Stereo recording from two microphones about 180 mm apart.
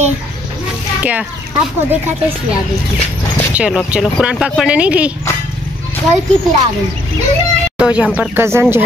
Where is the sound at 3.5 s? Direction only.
5° right (ahead or behind).